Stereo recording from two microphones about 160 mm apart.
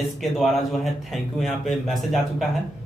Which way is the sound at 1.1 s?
Centre (ahead or behind).